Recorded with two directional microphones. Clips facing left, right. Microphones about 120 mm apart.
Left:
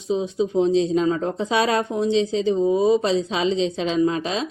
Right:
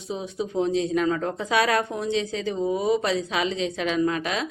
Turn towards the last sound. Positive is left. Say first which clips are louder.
# left 3 dB
turn(degrees=25)  # may be behind; listen again after turning